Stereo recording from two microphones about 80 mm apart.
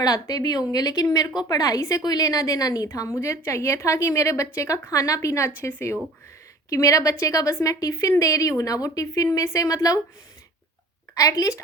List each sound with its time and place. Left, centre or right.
0.0 s a woman's voice: left
3.2 s a woman's voice: left
11.1 s a woman's voice: left